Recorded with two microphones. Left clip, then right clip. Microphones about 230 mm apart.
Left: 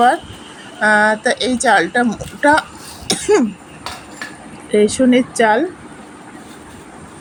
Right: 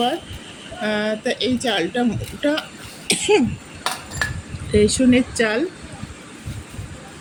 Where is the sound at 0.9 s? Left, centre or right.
Left.